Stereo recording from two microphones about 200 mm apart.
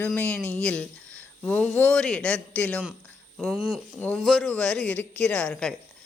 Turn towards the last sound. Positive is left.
turn(degrees=5)  # may be behind; listen again after turning